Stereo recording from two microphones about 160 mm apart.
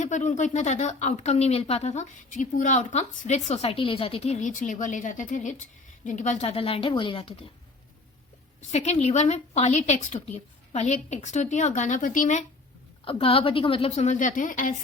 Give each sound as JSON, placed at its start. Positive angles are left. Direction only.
{"t": 0.0, "sound": "a woman's voice", "side_deg": 50}
{"t": 8.7, "sound": "speech", "side_deg": 45}
{"t": 13.1, "sound": "a woman's voice", "side_deg": 35}